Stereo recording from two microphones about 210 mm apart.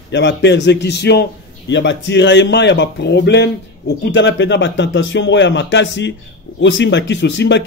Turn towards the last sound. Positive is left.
turn(degrees=55)  # may be behind; listen again after turning